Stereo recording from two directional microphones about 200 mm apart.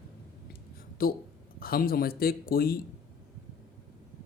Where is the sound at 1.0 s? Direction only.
50° left (ahead or behind).